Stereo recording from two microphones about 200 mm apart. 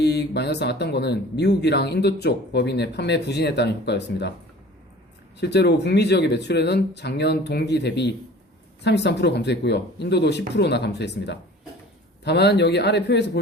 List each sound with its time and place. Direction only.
0.0 s speech: 55° left (ahead or behind)
5.4 s speech: 55° left (ahead or behind)